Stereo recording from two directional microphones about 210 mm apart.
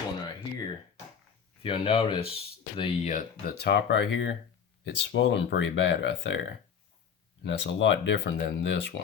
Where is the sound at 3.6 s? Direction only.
50° left (ahead or behind).